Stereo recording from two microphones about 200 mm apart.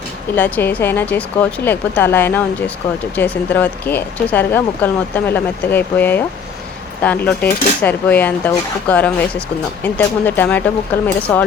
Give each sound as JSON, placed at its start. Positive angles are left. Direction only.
{"t": 0.3, "sound": "speech", "side_deg": 10}